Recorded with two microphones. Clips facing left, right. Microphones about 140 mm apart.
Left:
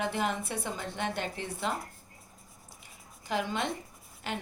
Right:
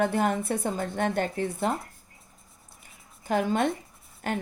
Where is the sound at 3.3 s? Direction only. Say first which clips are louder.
Right 7 dB; 50° right (ahead or behind).